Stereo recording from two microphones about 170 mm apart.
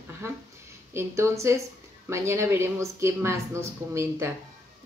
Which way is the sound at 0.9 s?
15° right (ahead or behind).